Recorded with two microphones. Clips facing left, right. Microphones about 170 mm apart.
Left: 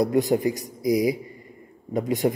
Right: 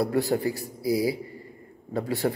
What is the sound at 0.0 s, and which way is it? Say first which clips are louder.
Speech: left 4 dB; 20° left (ahead or behind).